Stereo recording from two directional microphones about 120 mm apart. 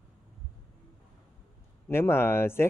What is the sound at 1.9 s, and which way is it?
Speech, 20° left (ahead or behind).